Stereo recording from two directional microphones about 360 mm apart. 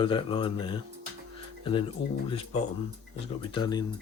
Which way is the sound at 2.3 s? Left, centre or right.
Centre.